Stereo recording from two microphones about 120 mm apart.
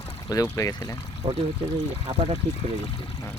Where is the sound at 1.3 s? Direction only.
45° right (ahead or behind).